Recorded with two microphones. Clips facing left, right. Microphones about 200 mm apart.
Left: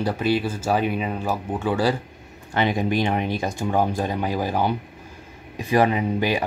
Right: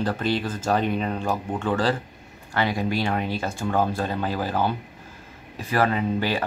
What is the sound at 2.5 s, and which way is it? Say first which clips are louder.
Speech: left 3 dB; 20° left (ahead or behind).